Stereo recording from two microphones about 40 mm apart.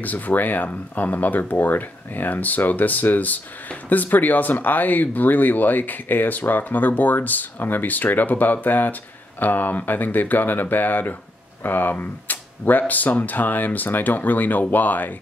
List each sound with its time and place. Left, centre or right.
0.0 s speech: left